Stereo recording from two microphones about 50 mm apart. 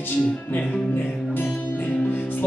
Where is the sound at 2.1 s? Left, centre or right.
Left.